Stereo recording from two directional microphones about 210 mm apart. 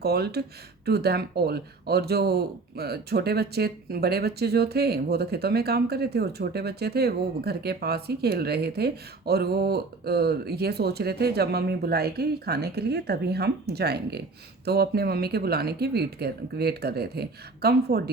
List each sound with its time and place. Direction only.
0.0 s speech: 50° right (ahead or behind)